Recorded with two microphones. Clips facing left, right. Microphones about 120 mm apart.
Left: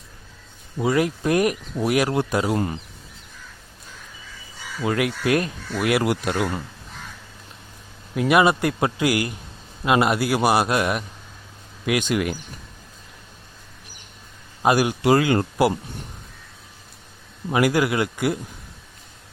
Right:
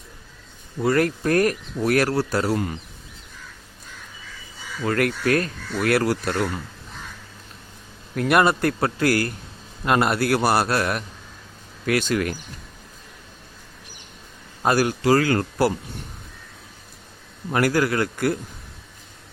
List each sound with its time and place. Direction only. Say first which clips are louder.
0.8 s speech: right 1 dB; 10° left (ahead or behind)
4.8 s speech: right 1 dB; 10° left (ahead or behind)
8.1 s speech: left 1 dB; 5° left (ahead or behind)
14.6 s speech: left 1 dB; 10° left (ahead or behind)
17.5 s speech: left 1 dB; 10° left (ahead or behind)